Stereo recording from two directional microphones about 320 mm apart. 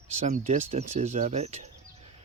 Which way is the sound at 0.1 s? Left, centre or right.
Right.